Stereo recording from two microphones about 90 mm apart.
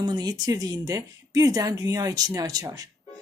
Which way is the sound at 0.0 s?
50° right (ahead or behind).